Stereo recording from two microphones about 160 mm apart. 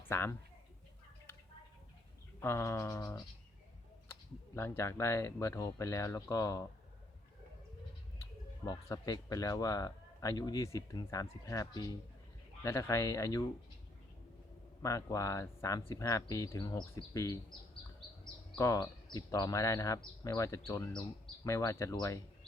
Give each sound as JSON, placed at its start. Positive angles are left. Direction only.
{"t": 0.1, "sound": "speech", "side_deg": 15}
{"t": 2.4, "sound": "speech", "side_deg": 15}
{"t": 8.2, "sound": "speech", "side_deg": 20}
{"t": 14.8, "sound": "speech", "side_deg": 20}
{"t": 18.5, "sound": "speech", "side_deg": 20}